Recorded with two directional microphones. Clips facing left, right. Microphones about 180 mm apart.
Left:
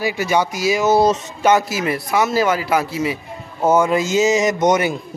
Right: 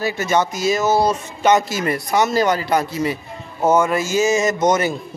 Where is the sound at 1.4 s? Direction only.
5° left (ahead or behind).